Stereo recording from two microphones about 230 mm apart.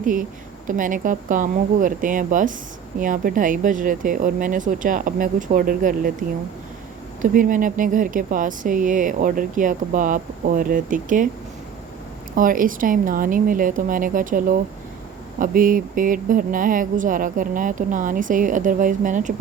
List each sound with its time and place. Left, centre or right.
0.0 s speech: right
7.2 s speech: right
12.4 s speech: right